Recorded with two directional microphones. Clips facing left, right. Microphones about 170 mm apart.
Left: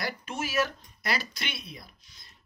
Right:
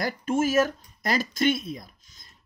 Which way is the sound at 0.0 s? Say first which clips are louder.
Right 9 dB; 45° right (ahead or behind).